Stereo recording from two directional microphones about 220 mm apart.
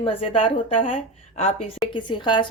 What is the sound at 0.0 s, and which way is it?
A woman's voice, 25° left (ahead or behind).